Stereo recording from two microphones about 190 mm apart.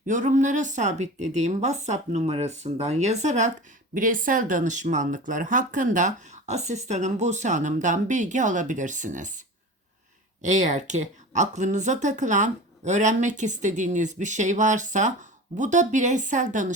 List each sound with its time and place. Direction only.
0.0 s speech: 40° right (ahead or behind)
10.4 s speech: 40° right (ahead or behind)